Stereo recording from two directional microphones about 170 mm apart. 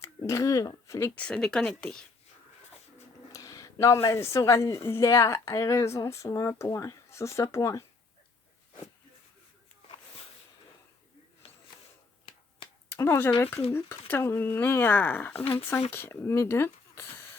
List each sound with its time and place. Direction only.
0.3 s speech: 20° left (ahead or behind); by 2.0 s 5° left (ahead or behind)
3.3 s speech: 20° left (ahead or behind)
11.4 s a sound: 35° left (ahead or behind)
12.9 s speech: 15° left (ahead or behind)